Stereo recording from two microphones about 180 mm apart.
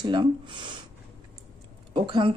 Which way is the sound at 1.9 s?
30° right (ahead or behind).